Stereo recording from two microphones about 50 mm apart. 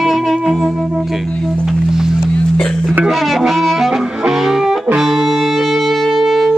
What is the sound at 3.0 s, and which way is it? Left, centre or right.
Music, centre.